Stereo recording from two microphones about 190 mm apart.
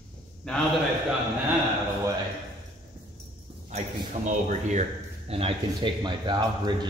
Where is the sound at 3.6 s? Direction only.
40° right (ahead or behind).